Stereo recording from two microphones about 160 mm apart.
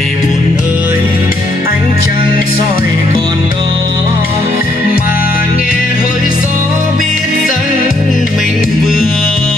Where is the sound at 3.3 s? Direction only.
25° right (ahead or behind).